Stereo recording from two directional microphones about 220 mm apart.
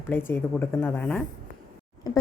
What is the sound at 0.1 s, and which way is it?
A woman's voice, 10° left (ahead or behind).